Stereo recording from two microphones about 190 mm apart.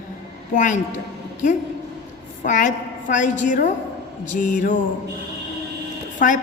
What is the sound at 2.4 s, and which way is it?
A woman's voice, 40° left (ahead or behind).